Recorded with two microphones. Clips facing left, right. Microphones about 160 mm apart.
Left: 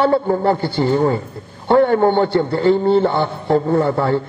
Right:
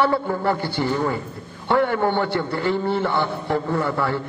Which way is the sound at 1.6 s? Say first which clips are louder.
Left 7 dB; 45° left (ahead or behind).